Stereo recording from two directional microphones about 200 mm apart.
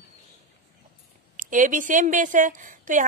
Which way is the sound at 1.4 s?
40° right (ahead or behind).